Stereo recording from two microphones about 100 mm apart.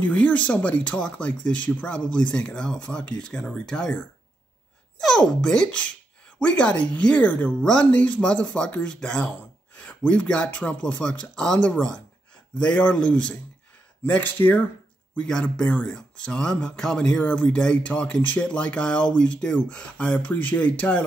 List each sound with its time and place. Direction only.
0.0 s speech: 10° left (ahead or behind)